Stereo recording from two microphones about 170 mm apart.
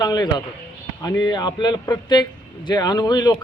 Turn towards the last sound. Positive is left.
turn(degrees=25)  # may be behind; listen again after turning